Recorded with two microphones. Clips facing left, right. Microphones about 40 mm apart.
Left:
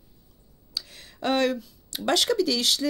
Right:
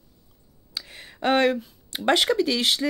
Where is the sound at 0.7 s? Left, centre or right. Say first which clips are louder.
Right 1 dB; right.